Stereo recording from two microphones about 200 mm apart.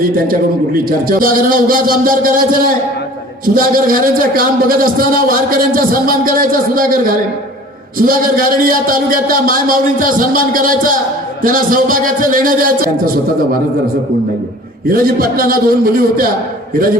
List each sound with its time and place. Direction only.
1.0 s a man's voice: 45° right (ahead or behind)
14.8 s a man's voice: 45° right (ahead or behind)